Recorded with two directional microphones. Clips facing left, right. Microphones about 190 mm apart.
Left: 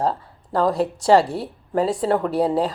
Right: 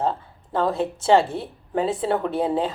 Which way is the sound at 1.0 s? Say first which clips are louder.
Left 2 dB; 35° left (ahead or behind).